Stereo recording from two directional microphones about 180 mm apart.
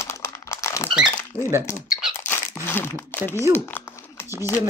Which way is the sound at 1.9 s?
5° right (ahead or behind).